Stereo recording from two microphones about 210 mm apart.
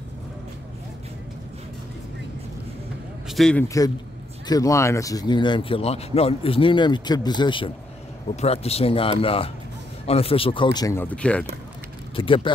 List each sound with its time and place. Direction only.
3.3 s a man's voice: centre (ahead or behind)
3.6 s a man's voice: 15° left (ahead or behind)
12.2 s speech: 25° left (ahead or behind)